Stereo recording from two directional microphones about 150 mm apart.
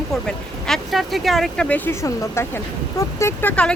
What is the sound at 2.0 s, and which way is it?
Speech, 20° left (ahead or behind).